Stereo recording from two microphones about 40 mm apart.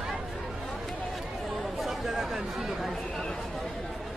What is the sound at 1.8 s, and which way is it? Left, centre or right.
Chatter, centre.